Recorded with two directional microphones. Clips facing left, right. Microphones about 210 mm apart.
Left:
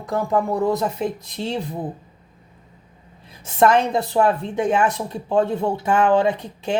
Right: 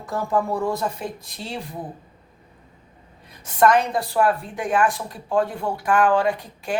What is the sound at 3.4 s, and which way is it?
Speech, 25° left (ahead or behind).